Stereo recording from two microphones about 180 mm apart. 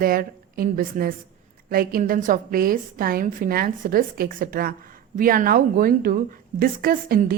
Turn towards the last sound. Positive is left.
turn(degrees=-50)  # may be behind; listen again after turning